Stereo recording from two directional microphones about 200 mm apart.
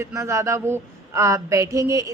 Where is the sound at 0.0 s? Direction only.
15° right (ahead or behind).